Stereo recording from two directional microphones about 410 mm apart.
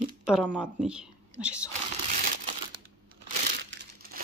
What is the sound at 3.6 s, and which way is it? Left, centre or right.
Crumpling, right.